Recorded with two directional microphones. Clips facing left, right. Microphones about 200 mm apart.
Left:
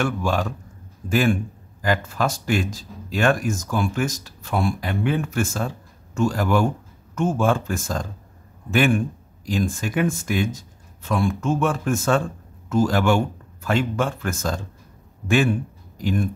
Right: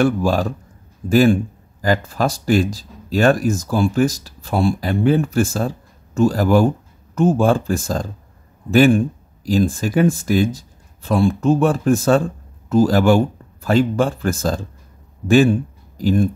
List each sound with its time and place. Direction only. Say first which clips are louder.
0.0 s a man's voice: right 6 dB; 35° right (ahead or behind)